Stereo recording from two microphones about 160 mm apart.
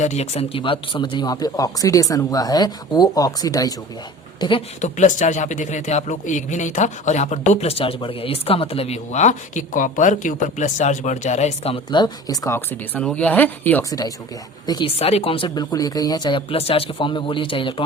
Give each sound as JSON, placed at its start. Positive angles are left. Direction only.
{"t": 0.0, "sound": "speech", "side_deg": 45}
{"t": 4.8, "sound": "speech", "side_deg": 50}
{"t": 11.9, "sound": "speech", "side_deg": 25}
{"t": 14.7, "sound": "speech", "side_deg": 30}